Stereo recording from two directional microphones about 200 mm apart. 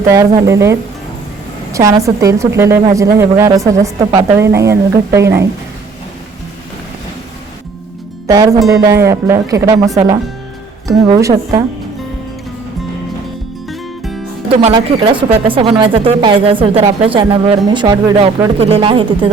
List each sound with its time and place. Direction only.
0.1 s speech: 15° right (ahead or behind)
8.3 s speech: 20° right (ahead or behind)
13.7 s music: centre (ahead or behind)
14.5 s a woman's voice: 25° right (ahead or behind)